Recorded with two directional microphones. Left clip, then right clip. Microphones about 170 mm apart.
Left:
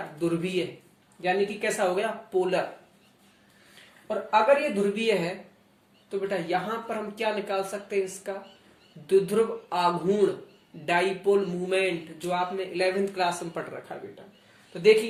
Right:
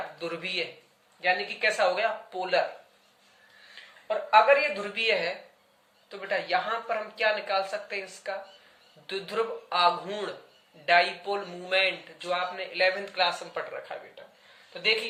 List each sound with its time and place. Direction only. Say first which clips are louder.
0.2 s speech: left 5 dB; 20° left (ahead or behind)
4.3 s speech: right 1 dB; 20° left (ahead or behind)